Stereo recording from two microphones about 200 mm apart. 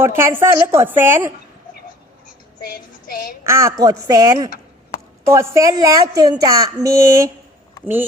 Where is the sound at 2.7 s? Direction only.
45° left (ahead or behind).